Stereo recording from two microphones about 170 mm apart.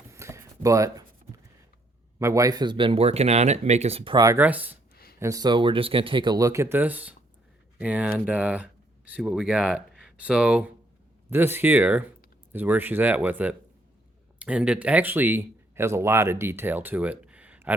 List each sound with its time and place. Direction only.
0.1 s a sound: 15° right (ahead or behind)
2.1 s speech: 20° right (ahead or behind)
4.4 s speech: 10° right (ahead or behind)
5.2 s speech: 20° right (ahead or behind)